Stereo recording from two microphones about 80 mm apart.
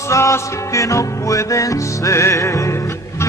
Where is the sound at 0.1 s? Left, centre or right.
Left.